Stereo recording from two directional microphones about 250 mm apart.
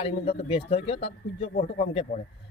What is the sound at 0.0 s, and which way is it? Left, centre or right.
Speech, left.